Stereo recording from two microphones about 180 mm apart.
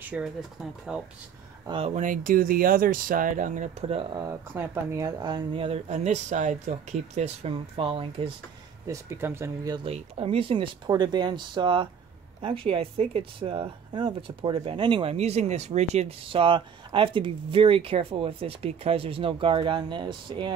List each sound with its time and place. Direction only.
0.1 s speech: 10° right (ahead or behind)
2.0 s speech: 45° right (ahead or behind); by 8.3 s 30° right (ahead or behind)
8.8 s speech: 15° right (ahead or behind)
9.8 s speech: 30° right (ahead or behind)